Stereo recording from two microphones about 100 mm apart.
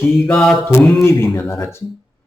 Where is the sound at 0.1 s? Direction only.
5° left (ahead or behind).